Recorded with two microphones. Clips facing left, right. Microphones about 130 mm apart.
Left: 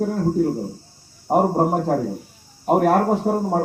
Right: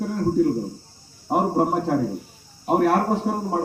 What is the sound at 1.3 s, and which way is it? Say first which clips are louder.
Speech: left 3 dB; 40° left (ahead or behind).